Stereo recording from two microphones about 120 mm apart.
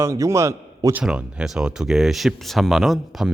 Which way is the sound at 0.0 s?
25° right (ahead or behind).